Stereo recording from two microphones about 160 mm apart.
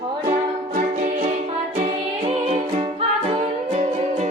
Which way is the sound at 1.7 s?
40° right (ahead or behind).